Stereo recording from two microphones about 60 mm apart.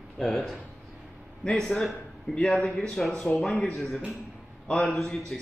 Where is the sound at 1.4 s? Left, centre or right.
Centre.